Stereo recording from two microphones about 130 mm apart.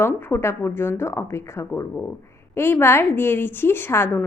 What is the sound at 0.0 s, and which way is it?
A woman's voice, 15° left (ahead or behind).